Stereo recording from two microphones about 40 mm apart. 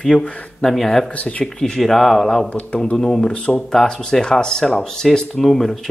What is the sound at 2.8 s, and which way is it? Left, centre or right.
Speech, centre.